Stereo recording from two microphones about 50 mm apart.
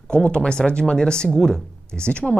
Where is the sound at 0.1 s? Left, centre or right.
Left.